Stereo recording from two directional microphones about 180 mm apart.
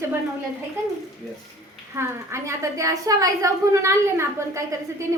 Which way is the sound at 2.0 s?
15° right (ahead or behind).